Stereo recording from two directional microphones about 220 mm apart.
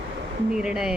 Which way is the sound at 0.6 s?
5° right (ahead or behind).